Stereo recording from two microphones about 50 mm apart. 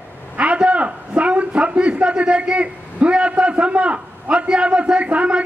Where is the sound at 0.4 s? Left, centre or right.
Right.